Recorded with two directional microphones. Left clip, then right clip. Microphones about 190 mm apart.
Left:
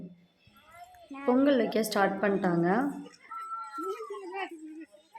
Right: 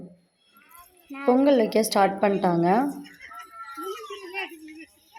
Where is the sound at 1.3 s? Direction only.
10° right (ahead or behind).